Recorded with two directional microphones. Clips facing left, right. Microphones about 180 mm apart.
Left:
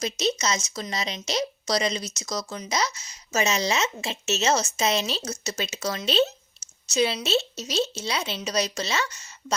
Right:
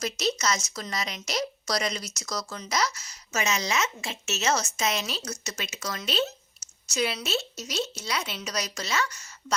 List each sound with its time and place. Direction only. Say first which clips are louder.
0.0 s speech: left 2 dB; 20° left (ahead or behind)